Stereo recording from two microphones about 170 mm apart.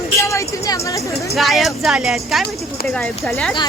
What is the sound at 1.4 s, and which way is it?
Speech, centre (ahead or behind).